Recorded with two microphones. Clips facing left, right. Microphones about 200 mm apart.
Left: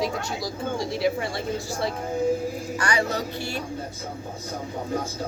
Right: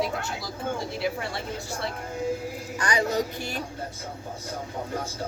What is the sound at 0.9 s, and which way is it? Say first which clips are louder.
Speech: left 5 dB; centre (ahead or behind).